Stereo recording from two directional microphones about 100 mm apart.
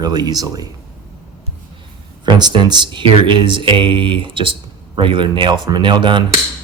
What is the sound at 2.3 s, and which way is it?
Speech, 45° right (ahead or behind).